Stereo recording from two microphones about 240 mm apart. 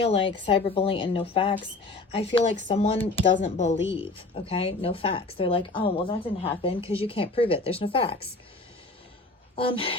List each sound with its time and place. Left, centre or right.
0.0 s speech: left
9.6 s speech: left